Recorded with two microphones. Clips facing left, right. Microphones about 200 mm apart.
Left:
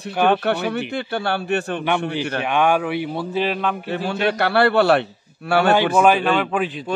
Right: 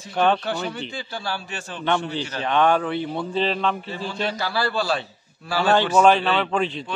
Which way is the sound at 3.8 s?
65° left (ahead or behind).